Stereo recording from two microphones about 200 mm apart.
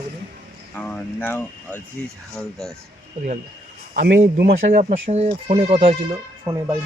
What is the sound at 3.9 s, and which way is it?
Speech, 45° right (ahead or behind).